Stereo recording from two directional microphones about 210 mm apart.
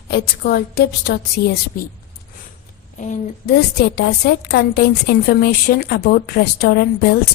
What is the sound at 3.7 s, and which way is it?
A woman's voice, 50° left (ahead or behind).